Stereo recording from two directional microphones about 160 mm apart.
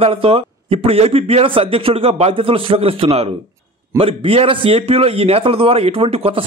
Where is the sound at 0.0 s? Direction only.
35° right (ahead or behind).